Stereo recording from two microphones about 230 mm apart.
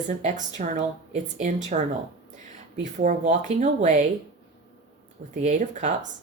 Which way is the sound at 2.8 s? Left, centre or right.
Right.